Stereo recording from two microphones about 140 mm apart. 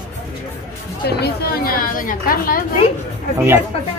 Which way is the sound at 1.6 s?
85° left.